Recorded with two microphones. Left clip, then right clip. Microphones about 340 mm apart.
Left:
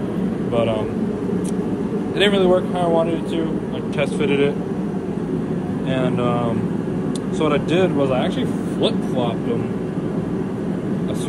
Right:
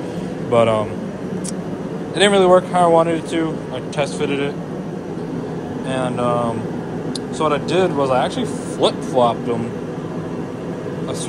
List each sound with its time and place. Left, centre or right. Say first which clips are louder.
0.5 s speech: right 6 dB; centre
2.1 s speech: right 4 dB; centre
5.9 s speech: right 2 dB; centre